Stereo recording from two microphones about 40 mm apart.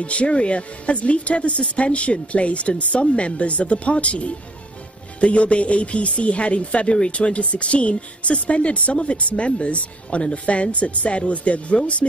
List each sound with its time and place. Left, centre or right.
0.0 s speech: left